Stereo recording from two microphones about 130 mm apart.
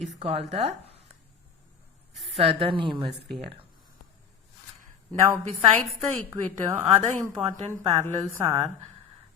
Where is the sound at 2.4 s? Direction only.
45° right (ahead or behind).